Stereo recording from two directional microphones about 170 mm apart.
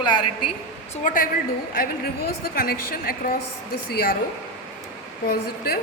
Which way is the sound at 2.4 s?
60° left (ahead or behind).